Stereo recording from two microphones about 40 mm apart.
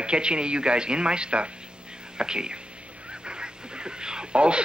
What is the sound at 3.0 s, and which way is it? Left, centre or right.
Goose, right.